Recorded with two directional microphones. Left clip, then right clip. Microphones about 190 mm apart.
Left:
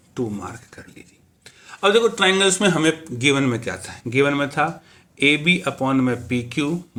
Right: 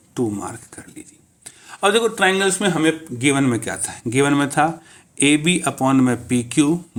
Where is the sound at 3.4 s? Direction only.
30° right (ahead or behind).